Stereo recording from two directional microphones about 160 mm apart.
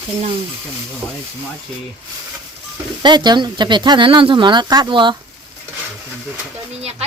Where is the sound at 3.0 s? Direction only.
25° right (ahead or behind).